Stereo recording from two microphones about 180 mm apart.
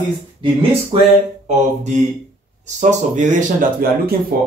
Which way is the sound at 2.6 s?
40° right (ahead or behind).